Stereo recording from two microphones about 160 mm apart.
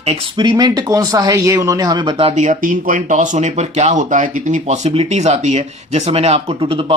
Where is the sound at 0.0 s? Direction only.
40° right (ahead or behind).